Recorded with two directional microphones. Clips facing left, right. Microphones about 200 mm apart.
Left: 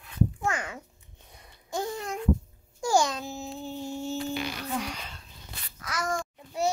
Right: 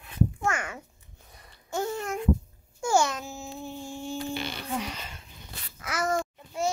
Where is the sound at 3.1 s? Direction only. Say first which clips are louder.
Left 1 dB; 35° left (ahead or behind).